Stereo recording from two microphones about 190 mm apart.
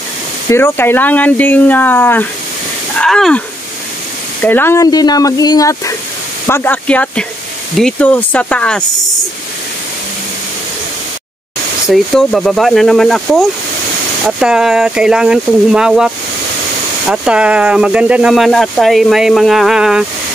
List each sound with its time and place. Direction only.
0.5 s speech: 15° left (ahead or behind)
11.9 s speech: centre (ahead or behind)
17.1 s speech: 5° right (ahead or behind)